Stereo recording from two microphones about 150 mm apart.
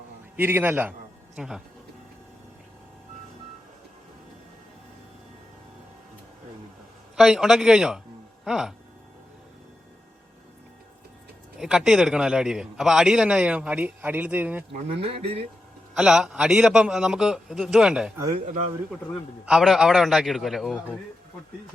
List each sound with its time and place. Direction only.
0.3 s a man's voice: 15° right (ahead or behind)
7.2 s a man's voice: centre (ahead or behind)
11.6 s a man's voice: 5° right (ahead or behind)
15.0 s speech: 40° right (ahead or behind)
16.0 s a man's voice: 5° right (ahead or behind)
18.3 s speech: 55° right (ahead or behind)
19.5 s a man's voice: 5° right (ahead or behind)